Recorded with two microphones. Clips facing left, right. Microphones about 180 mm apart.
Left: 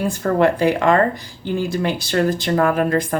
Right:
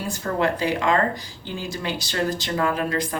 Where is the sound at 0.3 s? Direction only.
55° left (ahead or behind).